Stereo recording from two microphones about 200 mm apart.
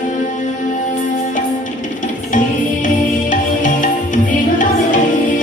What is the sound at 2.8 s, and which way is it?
Music, 40° left (ahead or behind).